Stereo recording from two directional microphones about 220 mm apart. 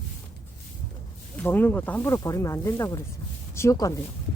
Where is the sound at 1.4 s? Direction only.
10° left (ahead or behind).